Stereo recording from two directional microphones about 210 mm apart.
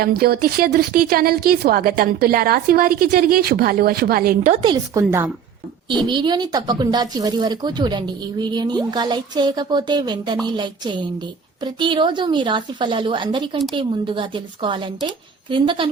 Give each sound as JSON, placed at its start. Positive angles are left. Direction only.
{"t": 0.0, "sound": "a woman's voice", "side_deg": -45}
{"t": 4.5, "sound": "a woman's voice", "side_deg": -20}